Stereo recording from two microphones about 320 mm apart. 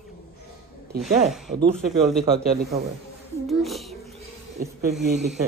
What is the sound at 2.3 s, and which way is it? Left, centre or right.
Speech, right.